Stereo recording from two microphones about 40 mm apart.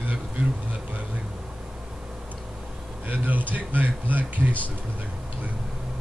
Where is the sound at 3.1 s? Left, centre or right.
Right.